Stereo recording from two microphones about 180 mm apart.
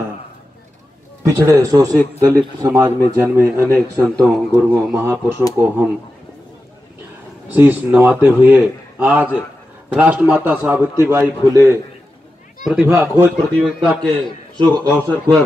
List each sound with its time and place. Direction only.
1.2 s speech: 15° right (ahead or behind)
7.5 s speech: 10° right (ahead or behind)
13.5 s a man's voice: 5° left (ahead or behind)